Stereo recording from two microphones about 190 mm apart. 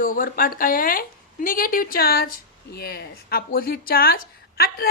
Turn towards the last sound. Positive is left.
turn(degrees=55)  # may be behind; listen again after turning